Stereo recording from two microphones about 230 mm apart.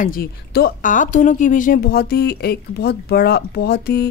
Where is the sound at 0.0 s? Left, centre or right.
Left.